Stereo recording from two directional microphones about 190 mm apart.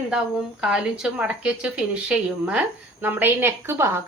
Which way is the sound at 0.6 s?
5° right (ahead or behind).